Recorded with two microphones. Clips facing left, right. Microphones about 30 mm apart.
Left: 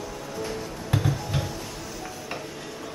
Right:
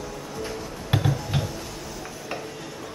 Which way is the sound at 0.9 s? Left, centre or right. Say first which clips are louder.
Right 2 dB; right.